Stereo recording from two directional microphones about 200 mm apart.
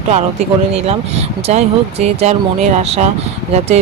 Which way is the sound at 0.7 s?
30° right (ahead or behind).